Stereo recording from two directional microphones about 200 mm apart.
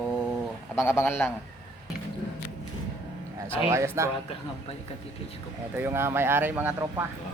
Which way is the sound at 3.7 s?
15° right (ahead or behind).